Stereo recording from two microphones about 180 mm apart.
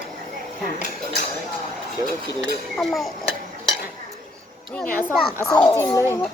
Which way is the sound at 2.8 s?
Centre (ahead or behind).